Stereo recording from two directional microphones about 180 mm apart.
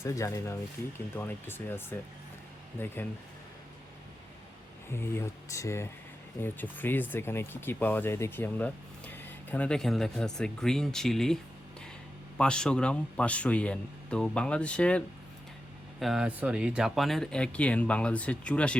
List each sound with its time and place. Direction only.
0.0 s speech: 15° left (ahead or behind)
4.9 s speech: 15° left (ahead or behind)
12.4 s speech: 5° left (ahead or behind)